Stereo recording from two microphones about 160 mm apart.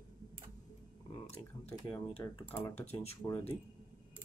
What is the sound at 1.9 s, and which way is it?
Speech, 25° left (ahead or behind).